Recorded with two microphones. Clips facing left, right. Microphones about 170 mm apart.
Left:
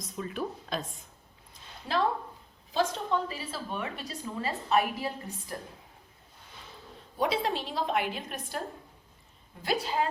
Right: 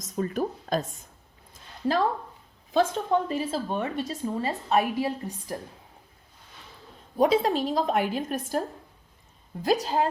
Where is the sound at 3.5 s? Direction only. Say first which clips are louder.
Right 7 dB; 35° right (ahead or behind).